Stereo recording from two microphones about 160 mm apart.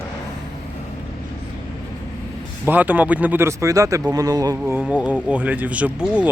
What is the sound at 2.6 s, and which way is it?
Speech, 10° right (ahead or behind).